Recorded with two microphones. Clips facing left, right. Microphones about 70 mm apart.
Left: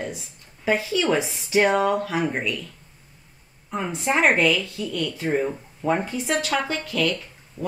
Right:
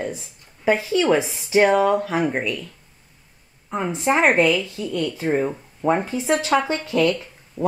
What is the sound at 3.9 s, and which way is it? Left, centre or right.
Speech, centre.